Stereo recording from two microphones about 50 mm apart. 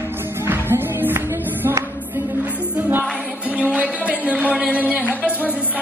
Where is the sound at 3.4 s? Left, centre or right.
Right.